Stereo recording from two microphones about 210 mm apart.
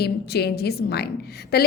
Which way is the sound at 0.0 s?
50° left (ahead or behind).